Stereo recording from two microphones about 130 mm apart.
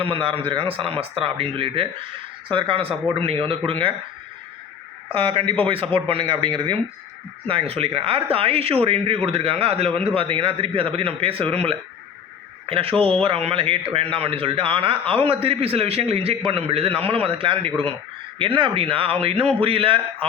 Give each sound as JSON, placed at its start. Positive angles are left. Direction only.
{"t": 0.0, "sound": "a man's voice", "side_deg": -40}
{"t": 5.0, "sound": "a man's voice", "side_deg": -45}